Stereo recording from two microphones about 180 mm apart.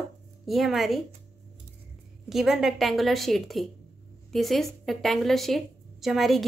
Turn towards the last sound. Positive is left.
turn(degrees=0)  # may be behind; listen again after turning